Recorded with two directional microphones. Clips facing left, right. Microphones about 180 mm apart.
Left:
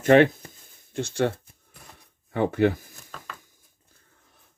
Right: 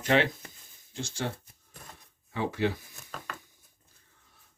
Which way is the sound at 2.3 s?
55° left (ahead or behind).